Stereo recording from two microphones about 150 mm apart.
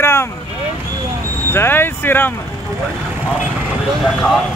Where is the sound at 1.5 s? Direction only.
15° left (ahead or behind).